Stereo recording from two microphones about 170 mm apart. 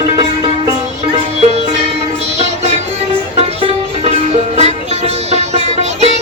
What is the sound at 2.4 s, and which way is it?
Music, 40° right (ahead or behind).